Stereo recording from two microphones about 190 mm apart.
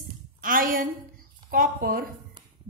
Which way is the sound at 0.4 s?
50° right (ahead or behind).